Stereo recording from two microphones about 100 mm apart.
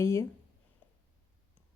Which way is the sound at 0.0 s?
30° left (ahead or behind).